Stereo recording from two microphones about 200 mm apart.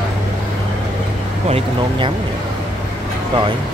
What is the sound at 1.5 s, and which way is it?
Speech, 25° right (ahead or behind).